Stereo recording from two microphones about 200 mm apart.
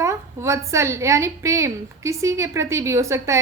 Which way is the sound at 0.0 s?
15° right (ahead or behind).